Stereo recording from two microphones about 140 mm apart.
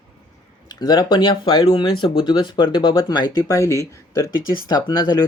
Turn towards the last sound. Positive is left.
turn(degrees=30)  # may be behind; listen again after turning